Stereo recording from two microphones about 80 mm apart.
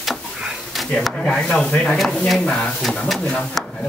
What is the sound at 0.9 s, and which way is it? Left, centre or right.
Speech, centre.